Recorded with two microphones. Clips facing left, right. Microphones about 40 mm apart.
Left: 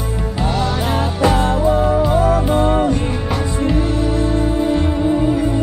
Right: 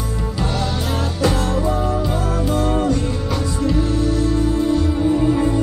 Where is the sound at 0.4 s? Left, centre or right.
Centre.